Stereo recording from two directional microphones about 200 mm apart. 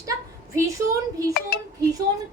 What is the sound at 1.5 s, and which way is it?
Speech, 50° left (ahead or behind).